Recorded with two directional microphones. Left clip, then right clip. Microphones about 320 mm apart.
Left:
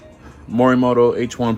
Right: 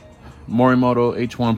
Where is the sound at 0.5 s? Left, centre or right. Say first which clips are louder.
Left 2 dB; right.